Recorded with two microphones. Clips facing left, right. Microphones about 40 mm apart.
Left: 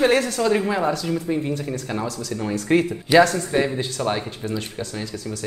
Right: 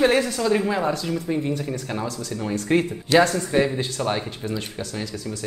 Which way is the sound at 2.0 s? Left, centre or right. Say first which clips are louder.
Left 1 dB; right.